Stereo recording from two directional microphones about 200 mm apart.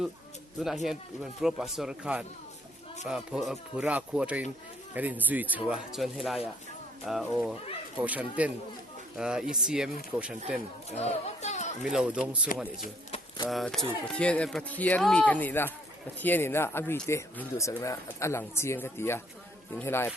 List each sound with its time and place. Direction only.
0.6 s speech: centre (ahead or behind)
11.0 s children playing: 35° left (ahead or behind)
11.9 s speech: 5° right (ahead or behind)
12.8 s a sound: 35° left (ahead or behind)
13.5 s speech: centre (ahead or behind)